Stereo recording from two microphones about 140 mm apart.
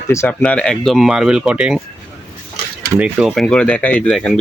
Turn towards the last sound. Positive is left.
turn(degrees=5)  # may be behind; listen again after turning